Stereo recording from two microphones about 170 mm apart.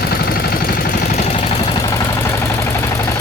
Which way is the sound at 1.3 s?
30° left (ahead or behind).